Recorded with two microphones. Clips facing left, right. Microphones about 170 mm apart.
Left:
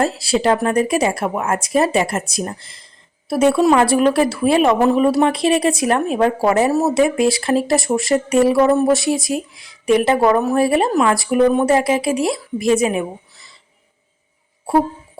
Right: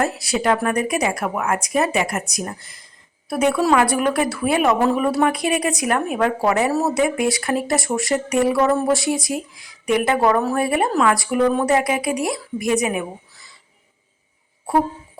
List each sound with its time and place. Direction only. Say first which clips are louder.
0.0 s speech: left 4 dB; 30° left (ahead or behind)